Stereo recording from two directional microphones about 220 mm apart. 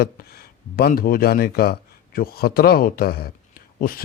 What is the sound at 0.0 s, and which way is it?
Speech, 45° left (ahead or behind).